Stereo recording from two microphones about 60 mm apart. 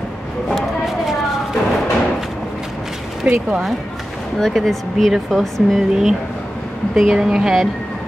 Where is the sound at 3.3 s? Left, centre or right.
Centre.